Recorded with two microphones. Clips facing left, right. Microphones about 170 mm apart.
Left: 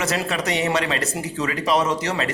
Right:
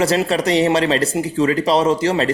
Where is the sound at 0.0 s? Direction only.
30° right (ahead or behind).